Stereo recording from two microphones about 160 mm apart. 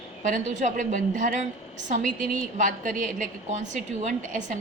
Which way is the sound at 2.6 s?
55° right (ahead or behind).